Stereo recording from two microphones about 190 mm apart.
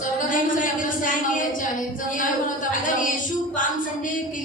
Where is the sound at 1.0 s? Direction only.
45° left (ahead or behind).